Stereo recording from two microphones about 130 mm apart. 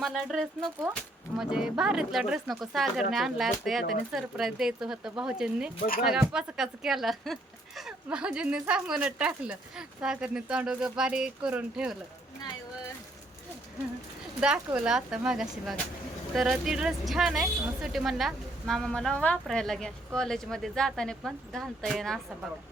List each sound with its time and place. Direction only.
0.0 s a woman's voice: centre (ahead or behind)
14.4 s speech: 5° right (ahead or behind)